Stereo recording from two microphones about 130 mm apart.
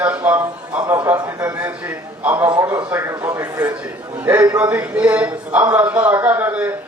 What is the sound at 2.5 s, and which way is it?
A man's voice, 25° right (ahead or behind).